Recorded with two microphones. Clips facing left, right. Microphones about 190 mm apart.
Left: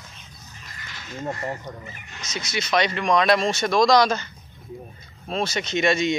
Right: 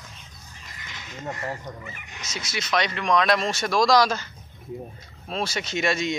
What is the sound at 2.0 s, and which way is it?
Speech, 15° right (ahead or behind).